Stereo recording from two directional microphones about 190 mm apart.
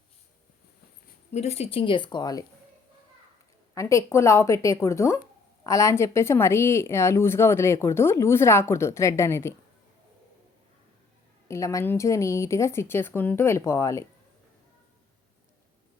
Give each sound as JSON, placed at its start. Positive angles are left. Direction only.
{"t": 1.3, "sound": "speech", "side_deg": 35}
{"t": 3.8, "sound": "speech", "side_deg": 15}
{"t": 11.4, "sound": "speech", "side_deg": 15}